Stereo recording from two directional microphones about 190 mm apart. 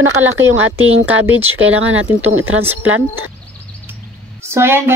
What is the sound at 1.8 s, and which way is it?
Speech, 90° right.